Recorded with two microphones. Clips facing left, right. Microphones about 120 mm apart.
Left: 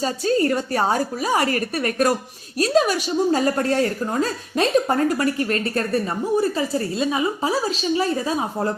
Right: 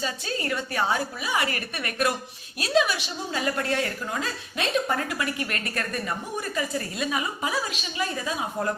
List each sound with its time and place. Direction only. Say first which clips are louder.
0.0 s a woman's voice: left 11 dB; 40° left (ahead or behind)